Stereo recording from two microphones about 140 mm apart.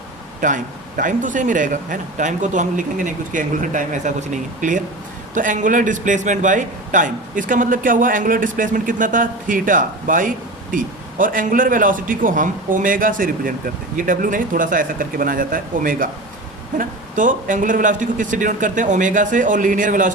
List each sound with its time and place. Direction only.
0.4 s a man's voice: 65° right (ahead or behind)
16.7 s a man's voice: 65° right (ahead or behind)